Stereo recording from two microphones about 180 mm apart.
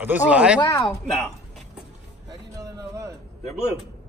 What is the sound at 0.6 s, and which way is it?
Speech, 20° left (ahead or behind).